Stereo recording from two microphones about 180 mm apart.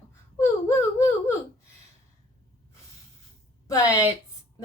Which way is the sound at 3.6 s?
15° left (ahead or behind).